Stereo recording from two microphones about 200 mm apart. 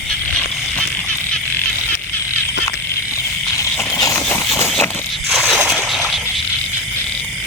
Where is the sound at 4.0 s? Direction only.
15° left (ahead or behind).